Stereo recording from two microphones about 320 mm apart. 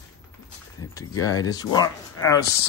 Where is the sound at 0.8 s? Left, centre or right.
Centre.